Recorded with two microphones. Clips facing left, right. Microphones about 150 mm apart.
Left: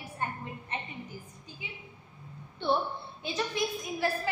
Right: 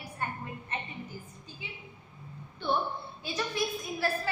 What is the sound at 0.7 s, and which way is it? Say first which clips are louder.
Speech: even; 20° left (ahead or behind).